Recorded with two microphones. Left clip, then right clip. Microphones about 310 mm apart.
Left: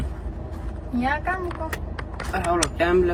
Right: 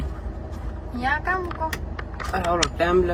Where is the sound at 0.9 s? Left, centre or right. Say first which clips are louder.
Even; left.